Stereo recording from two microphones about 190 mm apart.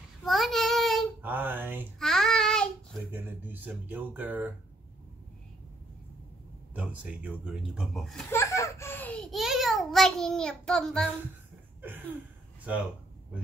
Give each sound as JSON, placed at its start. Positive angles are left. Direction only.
{"t": 0.2, "sound": "child singing", "side_deg": 0}
{"t": 1.2, "sound": "a sound", "side_deg": -10}
{"t": 2.0, "sound": "child singing", "side_deg": 0}
{"t": 3.1, "sound": "speech", "side_deg": -10}
{"t": 6.7, "sound": "speech", "side_deg": -5}
{"t": 8.3, "sound": "a child's voice", "side_deg": 15}